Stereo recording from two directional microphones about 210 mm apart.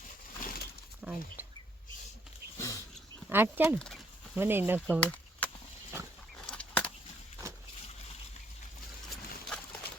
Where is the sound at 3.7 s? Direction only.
5° left (ahead or behind).